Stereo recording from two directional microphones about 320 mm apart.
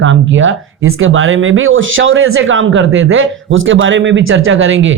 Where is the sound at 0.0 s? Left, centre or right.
Right.